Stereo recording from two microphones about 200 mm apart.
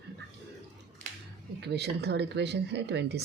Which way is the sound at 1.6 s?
55° right (ahead or behind).